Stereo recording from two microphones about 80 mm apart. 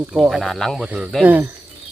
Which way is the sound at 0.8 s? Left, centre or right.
Centre.